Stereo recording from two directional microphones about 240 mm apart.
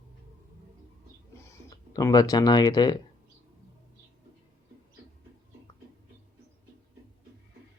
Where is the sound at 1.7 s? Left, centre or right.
Centre.